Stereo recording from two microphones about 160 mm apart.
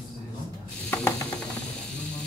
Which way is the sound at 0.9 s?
10° left (ahead or behind).